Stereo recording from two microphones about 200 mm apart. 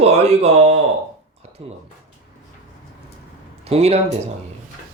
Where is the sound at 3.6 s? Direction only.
30° right (ahead or behind).